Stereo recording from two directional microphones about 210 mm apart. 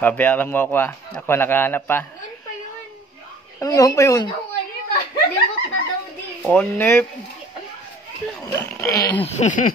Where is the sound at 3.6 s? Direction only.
15° left (ahead or behind).